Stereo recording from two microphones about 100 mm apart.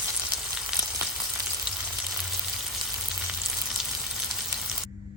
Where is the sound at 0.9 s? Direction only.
20° right (ahead or behind).